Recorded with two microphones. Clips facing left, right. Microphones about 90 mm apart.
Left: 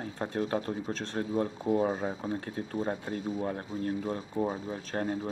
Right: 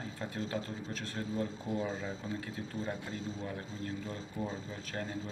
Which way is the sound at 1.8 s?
55° left (ahead or behind).